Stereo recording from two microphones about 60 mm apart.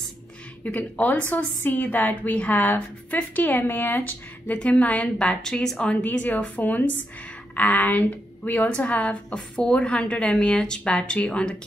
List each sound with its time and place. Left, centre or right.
0.9 s a woman's voice: left
4.6 s a woman's voice: left
6.0 s a woman's voice: left